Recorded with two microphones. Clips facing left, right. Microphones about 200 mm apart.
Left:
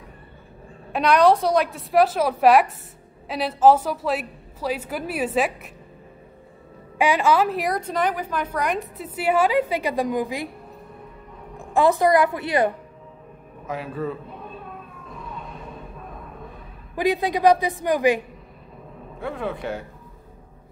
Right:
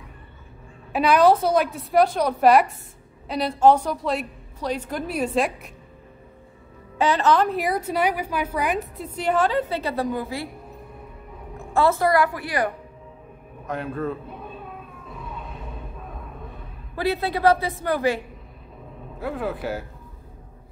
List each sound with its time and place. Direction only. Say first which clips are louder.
0.9 s a woman's voice: even; 5° right (ahead or behind)
7.0 s a woman's voice: even; 10° left (ahead or behind)
11.5 s a woman's voice: left 2 dB; 15° left (ahead or behind)
13.7 s a man's voice: right 1 dB; centre (ahead or behind)
15.0 s a sound: even; centre (ahead or behind)
16.9 s a woman's voice: left 2 dB; 15° left (ahead or behind)
19.1 s a woman's voice: right 1 dB; 5° right (ahead or behind)